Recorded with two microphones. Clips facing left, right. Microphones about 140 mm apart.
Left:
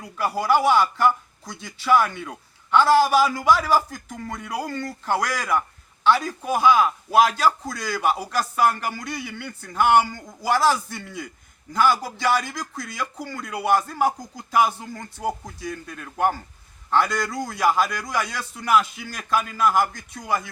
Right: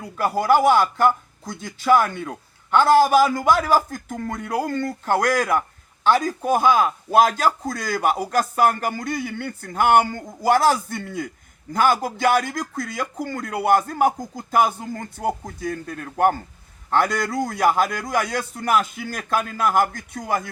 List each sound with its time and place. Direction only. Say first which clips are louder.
0.2 s a man's voice: right 3 dB; 50° right (ahead or behind)